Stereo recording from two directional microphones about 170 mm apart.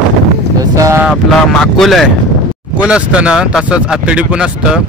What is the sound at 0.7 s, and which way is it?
Vehicle, 20° right (ahead or behind).